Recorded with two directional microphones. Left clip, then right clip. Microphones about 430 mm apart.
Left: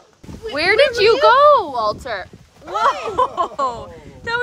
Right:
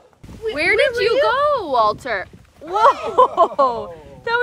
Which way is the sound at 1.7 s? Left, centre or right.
Centre.